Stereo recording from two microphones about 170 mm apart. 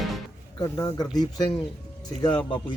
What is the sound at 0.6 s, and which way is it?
Speech, 20° left (ahead or behind).